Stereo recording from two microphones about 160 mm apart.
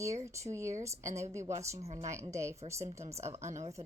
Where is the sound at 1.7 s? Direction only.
40° right (ahead or behind).